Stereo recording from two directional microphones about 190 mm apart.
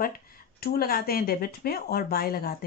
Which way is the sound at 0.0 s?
50° left (ahead or behind).